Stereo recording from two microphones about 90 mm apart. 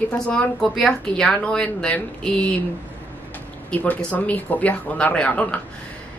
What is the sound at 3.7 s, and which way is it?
A woman's voice, 15° left (ahead or behind).